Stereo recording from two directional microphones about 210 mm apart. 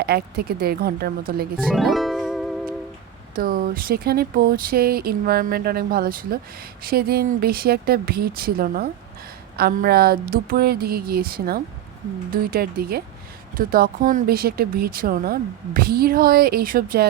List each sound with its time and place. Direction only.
0.0 s speech: 45° right (ahead or behind)
1.7 s music: centre (ahead or behind)
3.3 s speech: 45° right (ahead or behind)